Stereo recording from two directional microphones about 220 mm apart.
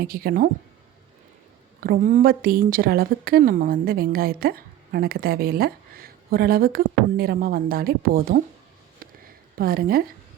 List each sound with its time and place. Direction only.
0.0 s speech: 45° right (ahead or behind)
1.8 s a woman's voice: 40° right (ahead or behind)
9.0 s a sound: 40° right (ahead or behind)